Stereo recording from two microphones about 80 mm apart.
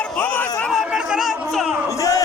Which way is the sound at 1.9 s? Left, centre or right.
Left.